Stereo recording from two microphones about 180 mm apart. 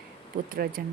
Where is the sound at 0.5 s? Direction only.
55° right (ahead or behind).